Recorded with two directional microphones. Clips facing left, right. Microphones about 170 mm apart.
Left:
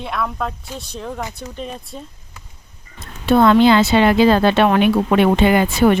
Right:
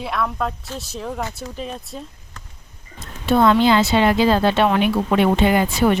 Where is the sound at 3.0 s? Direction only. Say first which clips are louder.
Left 3 dB; 60° left (ahead or behind).